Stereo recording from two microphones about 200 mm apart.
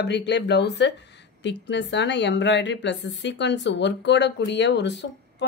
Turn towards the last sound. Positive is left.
turn(degrees=60)  # may be behind; listen again after turning